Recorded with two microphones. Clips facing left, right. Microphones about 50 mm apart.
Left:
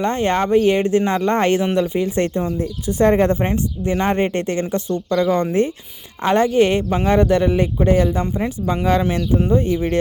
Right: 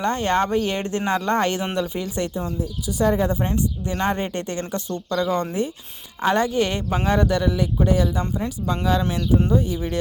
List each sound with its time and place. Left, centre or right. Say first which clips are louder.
0.0 s speech: left 2 dB; left
2.1 s speech: left 6 dB; left
3.4 s speech: left 4 dB; left
7.9 s speech: left 5 dB; left